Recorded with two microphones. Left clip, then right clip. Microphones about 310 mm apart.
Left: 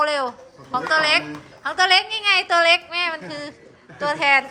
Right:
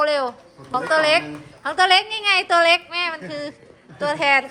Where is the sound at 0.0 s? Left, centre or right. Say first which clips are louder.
Right 1 dB; centre.